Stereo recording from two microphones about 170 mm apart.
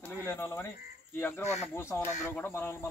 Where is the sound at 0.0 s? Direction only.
10° left (ahead or behind).